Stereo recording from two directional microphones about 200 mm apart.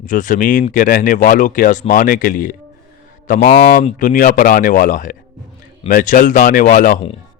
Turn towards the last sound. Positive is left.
turn(degrees=45)  # may be behind; listen again after turning